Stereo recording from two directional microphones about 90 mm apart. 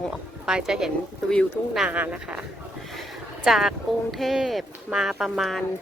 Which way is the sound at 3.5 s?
5° right (ahead or behind).